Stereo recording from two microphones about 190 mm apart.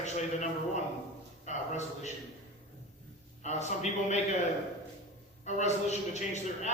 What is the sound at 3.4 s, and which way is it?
Speech, 35° left (ahead or behind).